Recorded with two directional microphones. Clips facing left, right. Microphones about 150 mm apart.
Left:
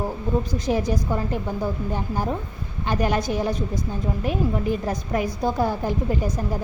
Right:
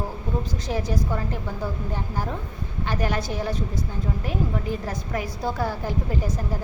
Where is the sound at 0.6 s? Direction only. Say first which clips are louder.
Left 4 dB; 15° left (ahead or behind).